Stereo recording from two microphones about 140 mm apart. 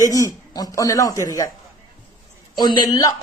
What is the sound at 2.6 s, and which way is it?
Speech, 30° left (ahead or behind).